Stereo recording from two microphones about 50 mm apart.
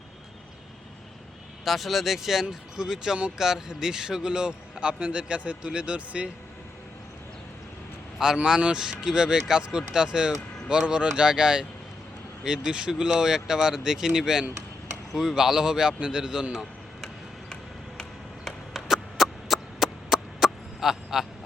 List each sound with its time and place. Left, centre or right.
1.6 s a man's voice: centre; by 6.3 s right
8.4 s a man's voice: centre
18.4 s chop: centre